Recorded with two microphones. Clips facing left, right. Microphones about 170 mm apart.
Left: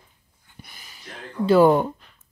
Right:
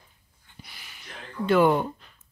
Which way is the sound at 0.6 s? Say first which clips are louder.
Left 2 dB; 50° left (ahead or behind).